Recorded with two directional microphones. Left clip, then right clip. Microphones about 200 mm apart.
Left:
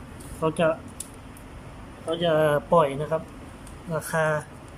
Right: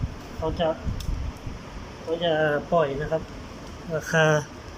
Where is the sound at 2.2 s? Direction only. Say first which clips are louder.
Left 2 dB; 20° left (ahead or behind).